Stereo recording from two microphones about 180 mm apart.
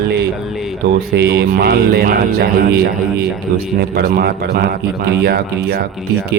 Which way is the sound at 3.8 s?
60° right (ahead or behind).